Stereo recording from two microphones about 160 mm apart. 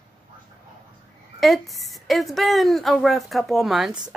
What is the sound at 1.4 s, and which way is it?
A woman's voice, centre (ahead or behind).